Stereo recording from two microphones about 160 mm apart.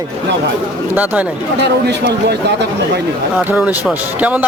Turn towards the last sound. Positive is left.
turn(degrees=-10)  # may be behind; listen again after turning